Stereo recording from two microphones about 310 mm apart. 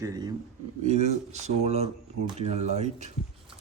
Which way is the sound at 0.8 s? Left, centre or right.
Right.